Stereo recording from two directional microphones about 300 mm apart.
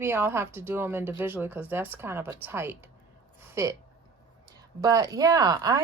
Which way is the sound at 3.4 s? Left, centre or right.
Centre.